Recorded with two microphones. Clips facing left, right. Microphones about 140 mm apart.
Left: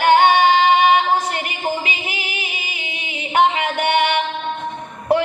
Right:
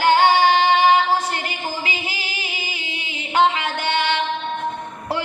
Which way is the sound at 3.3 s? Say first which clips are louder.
Left 2 dB; 20° left (ahead or behind).